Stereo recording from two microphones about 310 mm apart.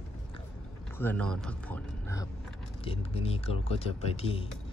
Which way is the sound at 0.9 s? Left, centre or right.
Centre.